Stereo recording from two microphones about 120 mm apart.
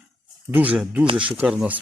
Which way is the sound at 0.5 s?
10° right (ahead or behind).